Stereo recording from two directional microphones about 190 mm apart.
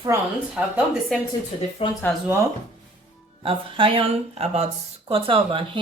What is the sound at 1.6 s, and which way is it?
Speech, 35° left (ahead or behind).